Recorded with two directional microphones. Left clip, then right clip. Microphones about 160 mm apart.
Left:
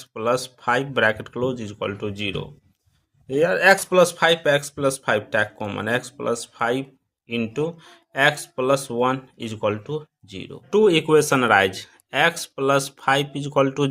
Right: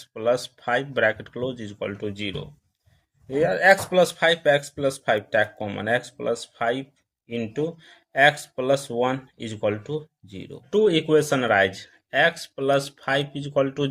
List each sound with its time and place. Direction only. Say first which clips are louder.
0.0 s speech: left 1 dB; 25° left (ahead or behind)